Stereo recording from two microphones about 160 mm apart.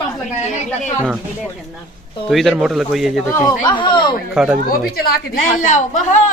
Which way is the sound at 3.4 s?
30° left (ahead or behind).